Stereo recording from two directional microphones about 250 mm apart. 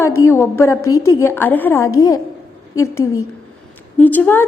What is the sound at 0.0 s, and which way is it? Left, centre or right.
A woman's voice, centre.